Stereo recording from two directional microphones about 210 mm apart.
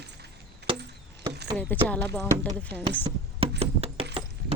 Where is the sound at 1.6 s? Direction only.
5° left (ahead or behind).